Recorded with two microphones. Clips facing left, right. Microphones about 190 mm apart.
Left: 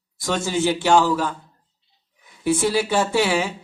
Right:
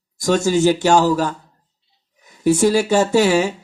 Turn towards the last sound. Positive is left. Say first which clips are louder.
# right 5 dB
turn(degrees=-40)  # may be behind; listen again after turning